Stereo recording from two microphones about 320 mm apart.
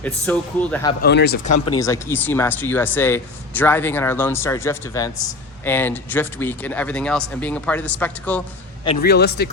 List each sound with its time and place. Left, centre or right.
0.0 s speech: centre
1.0 s a man's voice: left
1.5 s speech: left
1.7 s speech: centre
9.0 s a man's voice: left